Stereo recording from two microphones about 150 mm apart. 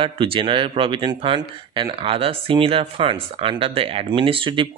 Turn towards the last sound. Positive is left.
turn(degrees=-35)  # may be behind; listen again after turning